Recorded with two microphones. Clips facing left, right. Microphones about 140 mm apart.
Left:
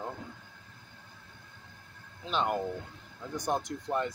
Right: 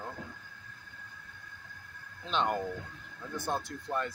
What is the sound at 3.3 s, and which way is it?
Speech, 15° left (ahead or behind).